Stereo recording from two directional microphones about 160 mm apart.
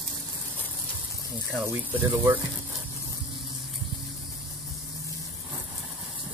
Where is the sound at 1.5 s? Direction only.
10° right (ahead or behind).